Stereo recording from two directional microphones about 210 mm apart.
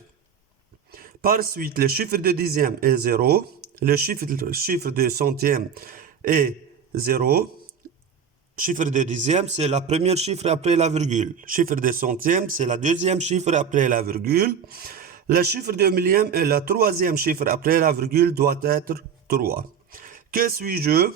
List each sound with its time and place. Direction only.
0.9 s a man's voice: 45° right (ahead or behind)
8.5 s a man's voice: 40° right (ahead or behind)